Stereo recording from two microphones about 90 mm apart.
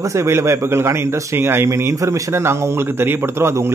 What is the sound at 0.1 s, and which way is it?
A man's voice, 30° right (ahead or behind).